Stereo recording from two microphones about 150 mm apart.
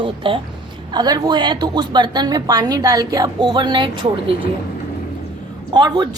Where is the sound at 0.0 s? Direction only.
35° right (ahead or behind).